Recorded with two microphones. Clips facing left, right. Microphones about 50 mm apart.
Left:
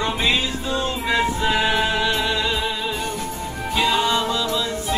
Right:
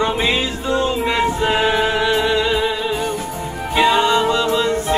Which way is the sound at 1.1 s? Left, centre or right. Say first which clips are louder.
Left 1 dB; right.